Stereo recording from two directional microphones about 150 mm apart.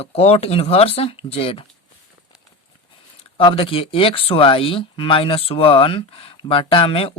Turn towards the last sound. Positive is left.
turn(degrees=40)  # may be behind; listen again after turning